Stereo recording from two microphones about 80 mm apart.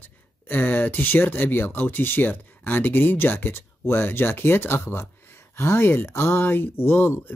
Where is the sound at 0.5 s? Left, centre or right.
Left.